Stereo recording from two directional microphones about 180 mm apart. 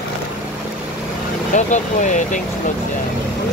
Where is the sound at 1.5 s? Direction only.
45° left (ahead or behind).